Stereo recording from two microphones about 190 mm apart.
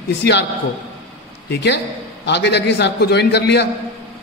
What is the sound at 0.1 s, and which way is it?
Speech, 65° left (ahead or behind).